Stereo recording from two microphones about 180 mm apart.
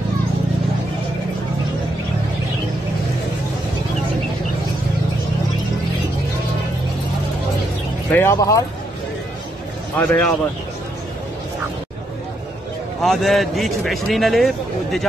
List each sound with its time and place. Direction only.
8.1 s speech: 15° left (ahead or behind)
9.9 s speech: 5° left (ahead or behind)
13.0 s a man's voice: centre (ahead or behind)